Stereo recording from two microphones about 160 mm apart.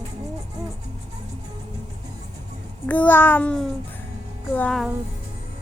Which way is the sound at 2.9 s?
10° left (ahead or behind).